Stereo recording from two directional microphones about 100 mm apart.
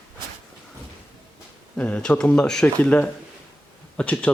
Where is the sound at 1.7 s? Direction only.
10° left (ahead or behind).